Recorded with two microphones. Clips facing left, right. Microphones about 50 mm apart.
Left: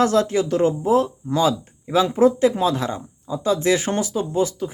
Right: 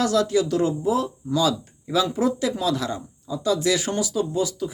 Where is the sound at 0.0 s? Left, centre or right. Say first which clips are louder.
Left 2 dB; left.